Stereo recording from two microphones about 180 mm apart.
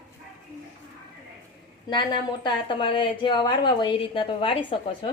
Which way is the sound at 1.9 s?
25° left (ahead or behind).